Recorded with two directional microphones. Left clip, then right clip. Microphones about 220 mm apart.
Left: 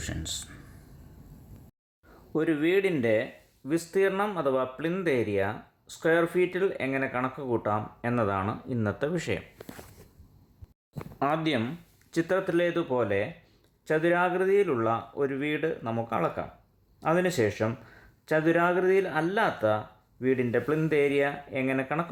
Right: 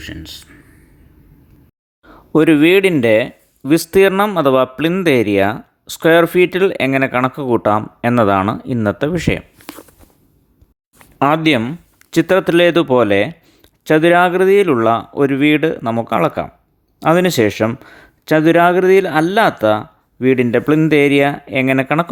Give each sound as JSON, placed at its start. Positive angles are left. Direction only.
{"t": 0.0, "sound": "speech", "side_deg": -5}
{"t": 2.3, "sound": "speech", "side_deg": -40}
{"t": 11.2, "sound": "speech", "side_deg": -35}